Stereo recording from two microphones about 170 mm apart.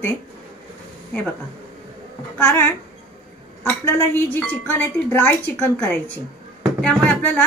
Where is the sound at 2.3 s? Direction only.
10° left (ahead or behind).